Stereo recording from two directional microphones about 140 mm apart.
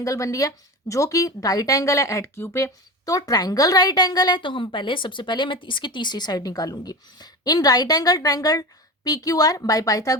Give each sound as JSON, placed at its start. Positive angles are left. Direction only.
{"t": 0.0, "sound": "a woman's voice", "side_deg": 25}